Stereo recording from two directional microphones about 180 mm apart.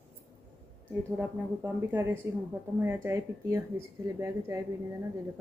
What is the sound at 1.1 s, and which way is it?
A woman's voice, 15° right (ahead or behind).